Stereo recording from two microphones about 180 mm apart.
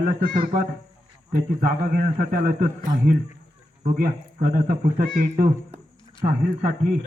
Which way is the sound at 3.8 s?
45° right (ahead or behind).